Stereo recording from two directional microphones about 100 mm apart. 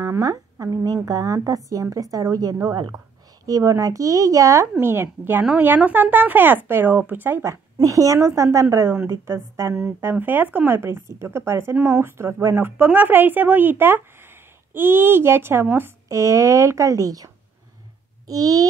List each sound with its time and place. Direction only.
0.0 s speech: 30° right (ahead or behind)
12.5 s speech: 20° right (ahead or behind); by 18.7 s 35° right (ahead or behind)